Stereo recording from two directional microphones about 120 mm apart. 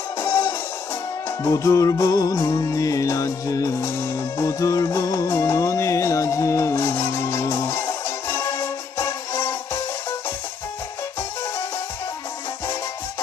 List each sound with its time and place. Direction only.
0.2 s music: 20° left (ahead or behind)